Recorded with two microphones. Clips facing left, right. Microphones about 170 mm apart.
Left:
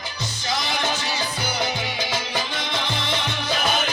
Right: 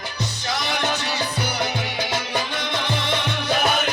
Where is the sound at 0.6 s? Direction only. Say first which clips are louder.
Right 4 dB; 60° right (ahead or behind).